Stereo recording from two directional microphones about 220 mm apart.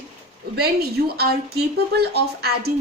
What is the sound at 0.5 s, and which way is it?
A woman's voice, 45° right (ahead or behind).